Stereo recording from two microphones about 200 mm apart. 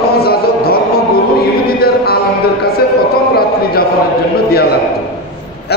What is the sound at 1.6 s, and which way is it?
Chant, 50° left (ahead or behind).